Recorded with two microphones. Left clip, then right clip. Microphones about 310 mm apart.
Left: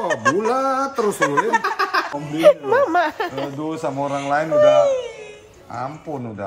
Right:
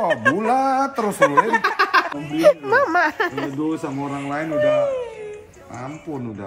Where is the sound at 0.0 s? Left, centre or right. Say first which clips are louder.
Even; centre.